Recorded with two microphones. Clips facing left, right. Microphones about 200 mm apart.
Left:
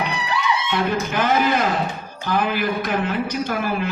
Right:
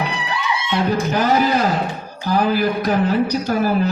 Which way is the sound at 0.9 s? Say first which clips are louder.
Right 4 dB; 40° right (ahead or behind).